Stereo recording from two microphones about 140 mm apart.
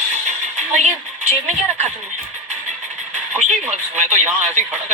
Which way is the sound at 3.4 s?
55° right (ahead or behind).